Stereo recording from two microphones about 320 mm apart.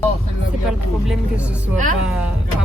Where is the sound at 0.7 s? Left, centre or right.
Centre.